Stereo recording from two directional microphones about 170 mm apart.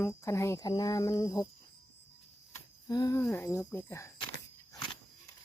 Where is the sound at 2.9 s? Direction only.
20° left (ahead or behind).